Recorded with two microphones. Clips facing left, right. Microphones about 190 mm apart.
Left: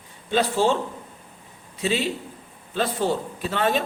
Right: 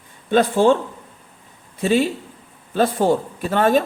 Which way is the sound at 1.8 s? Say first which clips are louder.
Right 6 dB; 50° right (ahead or behind).